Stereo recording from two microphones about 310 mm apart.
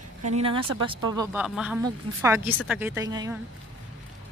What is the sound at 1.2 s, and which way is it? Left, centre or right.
Speech, centre.